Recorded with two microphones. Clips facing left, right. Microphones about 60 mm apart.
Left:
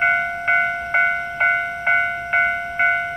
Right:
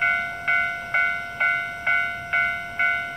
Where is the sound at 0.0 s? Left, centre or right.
Centre.